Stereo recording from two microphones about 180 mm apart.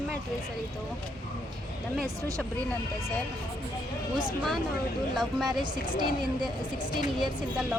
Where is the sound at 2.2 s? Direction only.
20° right (ahead or behind).